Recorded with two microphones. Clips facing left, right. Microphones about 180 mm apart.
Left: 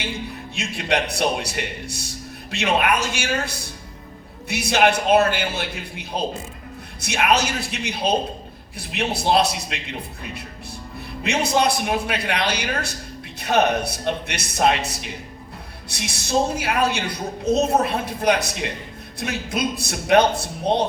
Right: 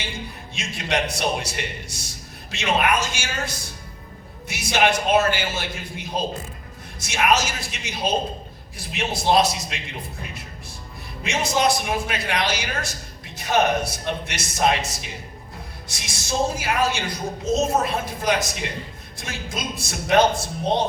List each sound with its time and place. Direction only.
0.5 s a woman's voice: 60° left (ahead or behind)
7.0 s a woman's voice: 65° left (ahead or behind)
11.2 s a woman's voice: 65° left (ahead or behind)